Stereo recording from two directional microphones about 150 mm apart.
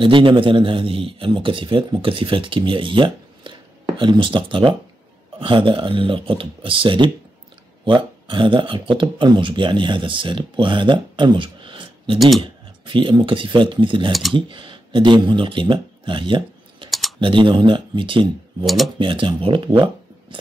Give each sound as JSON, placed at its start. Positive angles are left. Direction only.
{"t": 0.0, "sound": "a man's voice", "side_deg": -35}